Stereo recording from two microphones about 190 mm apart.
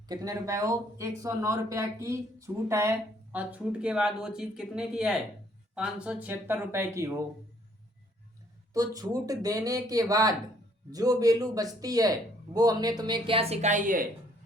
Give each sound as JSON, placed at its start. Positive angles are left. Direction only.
{"t": 0.1, "sound": "speech", "side_deg": -20}
{"t": 8.7, "sound": "speech", "side_deg": -20}